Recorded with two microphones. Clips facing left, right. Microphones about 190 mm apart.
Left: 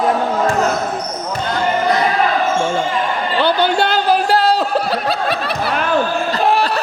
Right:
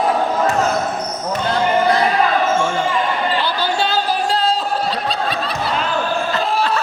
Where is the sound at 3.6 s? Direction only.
65° left (ahead or behind).